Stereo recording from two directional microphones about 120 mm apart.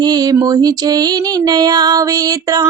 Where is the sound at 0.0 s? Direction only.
35° right (ahead or behind).